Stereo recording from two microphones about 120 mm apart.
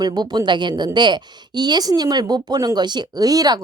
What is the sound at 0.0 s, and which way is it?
Speech, 35° right (ahead or behind).